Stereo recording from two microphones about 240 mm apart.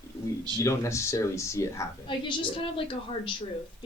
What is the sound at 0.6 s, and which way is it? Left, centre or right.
A man's voice, centre.